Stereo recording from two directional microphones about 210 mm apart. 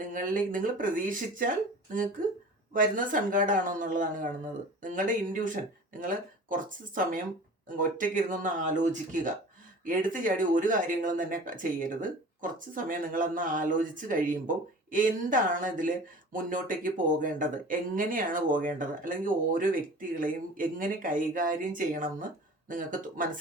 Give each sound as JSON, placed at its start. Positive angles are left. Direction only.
{"t": 0.0, "sound": "speech", "side_deg": -40}